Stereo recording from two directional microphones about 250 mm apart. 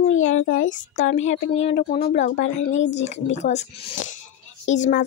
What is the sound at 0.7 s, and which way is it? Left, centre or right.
A woman's voice, left.